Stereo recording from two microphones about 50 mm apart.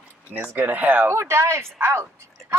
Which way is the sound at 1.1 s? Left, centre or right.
Right.